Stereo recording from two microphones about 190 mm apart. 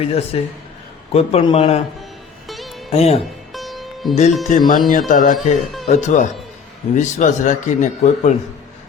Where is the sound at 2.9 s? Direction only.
35° left (ahead or behind).